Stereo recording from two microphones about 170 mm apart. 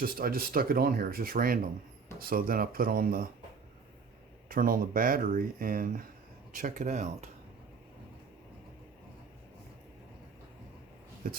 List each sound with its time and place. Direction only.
0.0 s speech: 60° right (ahead or behind)
4.4 s speech: 55° right (ahead or behind)
11.2 s speech: 55° right (ahead or behind)